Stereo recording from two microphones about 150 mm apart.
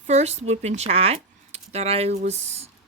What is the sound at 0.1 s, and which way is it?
Speech, 50° right (ahead or behind).